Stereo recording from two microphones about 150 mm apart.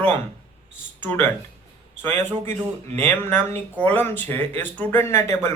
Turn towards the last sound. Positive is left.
turn(degrees=15)  # may be behind; listen again after turning